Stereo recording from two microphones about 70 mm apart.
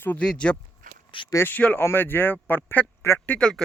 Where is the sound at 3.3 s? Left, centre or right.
Centre.